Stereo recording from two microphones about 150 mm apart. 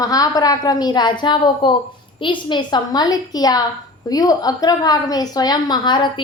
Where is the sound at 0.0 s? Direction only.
25° left (ahead or behind).